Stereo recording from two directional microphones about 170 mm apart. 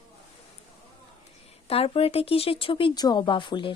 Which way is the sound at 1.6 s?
35° left (ahead or behind).